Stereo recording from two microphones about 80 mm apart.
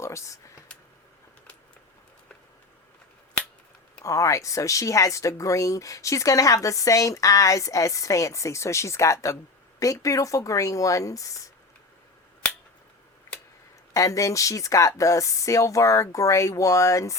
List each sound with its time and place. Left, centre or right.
0.0 s a sound: left
4.0 s speech: left
13.9 s speech: left